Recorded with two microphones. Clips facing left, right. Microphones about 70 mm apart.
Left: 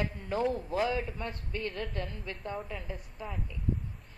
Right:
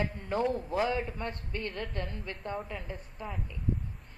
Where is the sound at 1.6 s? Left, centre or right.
Centre.